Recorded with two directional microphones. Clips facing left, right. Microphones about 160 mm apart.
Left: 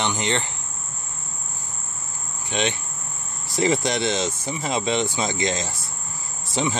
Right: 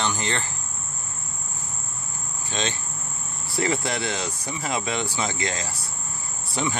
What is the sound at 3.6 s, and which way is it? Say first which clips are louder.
Speech: left 4 dB; 20° left (ahead or behind).